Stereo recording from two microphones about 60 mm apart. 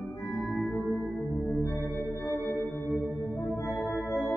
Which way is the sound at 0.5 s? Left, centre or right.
Centre.